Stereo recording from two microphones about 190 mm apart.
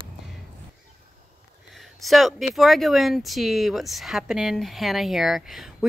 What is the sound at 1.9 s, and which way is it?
Speech, centre (ahead or behind).